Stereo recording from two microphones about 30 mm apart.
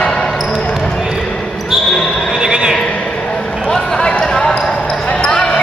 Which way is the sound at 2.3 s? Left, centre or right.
Right.